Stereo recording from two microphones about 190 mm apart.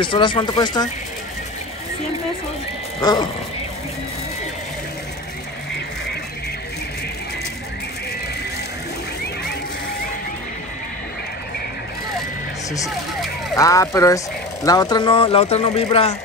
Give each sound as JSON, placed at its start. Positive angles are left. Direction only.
{"t": 0.0, "sound": "speech", "side_deg": 25}
{"t": 3.0, "sound": "a sound", "side_deg": 20}
{"t": 13.6, "sound": "speech", "side_deg": 15}